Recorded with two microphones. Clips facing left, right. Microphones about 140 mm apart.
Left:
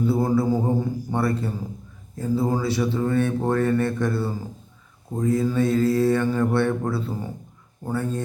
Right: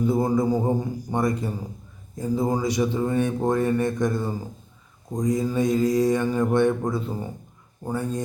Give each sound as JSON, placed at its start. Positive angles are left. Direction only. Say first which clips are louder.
{"t": 0.0, "sound": "speech", "louder": "even", "side_deg": -15}